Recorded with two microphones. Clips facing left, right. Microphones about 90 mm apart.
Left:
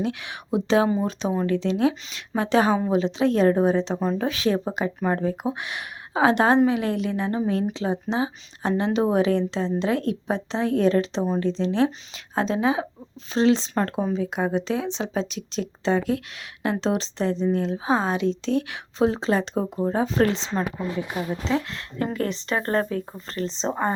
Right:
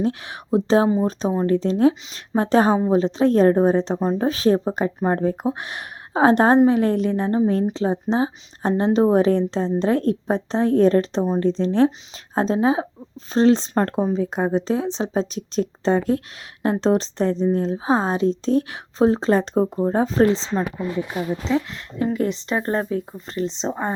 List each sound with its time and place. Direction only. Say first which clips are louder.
0.0 s a woman's voice: right 4 dB; 35° right (ahead or behind)
4.0 s speech: right 3 dB; 25° right (ahead or behind)
4.3 s a woman's voice: right 5 dB; 40° right (ahead or behind)
20.2 s speech: right 5 dB; 30° right (ahead or behind)
21.7 s speech: right 4 dB; 10° right (ahead or behind)